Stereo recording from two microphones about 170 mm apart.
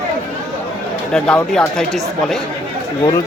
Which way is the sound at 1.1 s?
5° left (ahead or behind).